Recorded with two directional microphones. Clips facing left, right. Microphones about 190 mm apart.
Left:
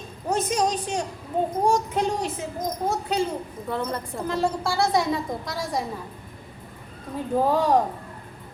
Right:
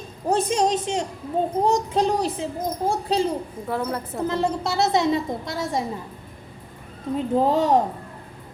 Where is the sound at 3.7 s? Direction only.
5° right (ahead or behind).